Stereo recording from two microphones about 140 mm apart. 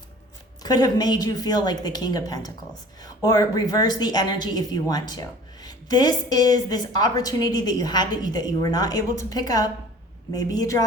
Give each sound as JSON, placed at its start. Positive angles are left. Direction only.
{"t": 0.6, "sound": "a woman's voice", "side_deg": 30}